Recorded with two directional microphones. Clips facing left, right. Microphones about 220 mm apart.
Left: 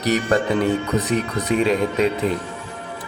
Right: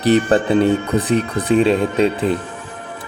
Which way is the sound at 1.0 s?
30° right (ahead or behind).